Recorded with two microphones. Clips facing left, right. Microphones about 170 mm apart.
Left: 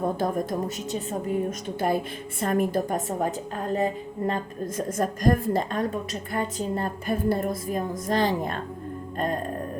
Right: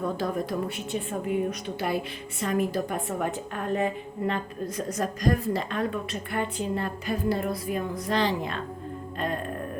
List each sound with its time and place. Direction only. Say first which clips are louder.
0.0 s a woman's voice: left 3 dB; 45° left (ahead or behind)
9.1 s music: left 3 dB; 45° left (ahead or behind)